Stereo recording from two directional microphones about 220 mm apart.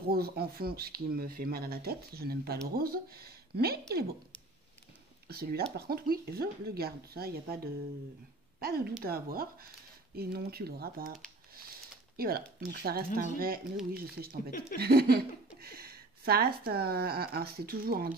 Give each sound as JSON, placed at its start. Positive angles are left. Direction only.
{"t": 0.1, "sound": "speech", "side_deg": -45}
{"t": 5.3, "sound": "speech", "side_deg": -45}
{"t": 12.2, "sound": "speech", "side_deg": -45}